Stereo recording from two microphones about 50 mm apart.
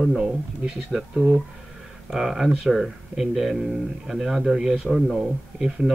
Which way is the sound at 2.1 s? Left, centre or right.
Centre.